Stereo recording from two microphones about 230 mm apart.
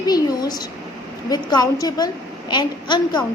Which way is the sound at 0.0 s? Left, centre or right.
Centre.